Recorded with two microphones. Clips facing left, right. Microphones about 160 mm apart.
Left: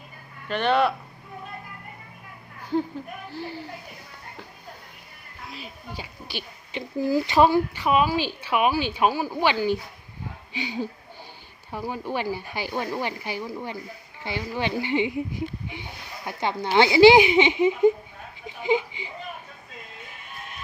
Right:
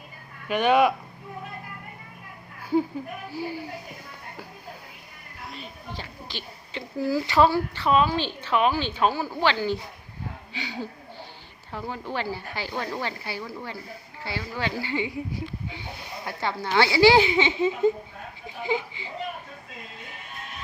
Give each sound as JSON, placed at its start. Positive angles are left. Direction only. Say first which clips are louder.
{"t": 0.4, "sound": "speech", "louder": "right 2 dB", "side_deg": -10}
{"t": 3.2, "sound": "speech", "louder": "right 2 dB", "side_deg": -10}
{"t": 5.5, "sound": "speech", "louder": "even", "side_deg": 5}
{"t": 18.4, "sound": "a sound", "louder": "left 4 dB", "side_deg": 20}